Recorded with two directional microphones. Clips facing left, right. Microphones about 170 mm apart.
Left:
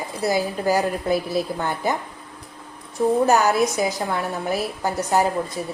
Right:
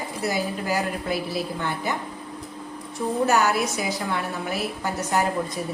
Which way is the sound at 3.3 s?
40° left (ahead or behind).